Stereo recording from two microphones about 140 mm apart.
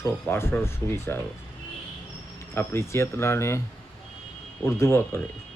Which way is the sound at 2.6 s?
20° left (ahead or behind).